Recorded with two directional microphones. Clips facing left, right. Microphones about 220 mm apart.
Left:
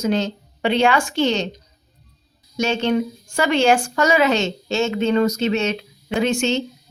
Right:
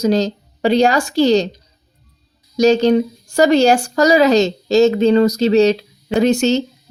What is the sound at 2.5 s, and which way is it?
Speech, 40° right (ahead or behind).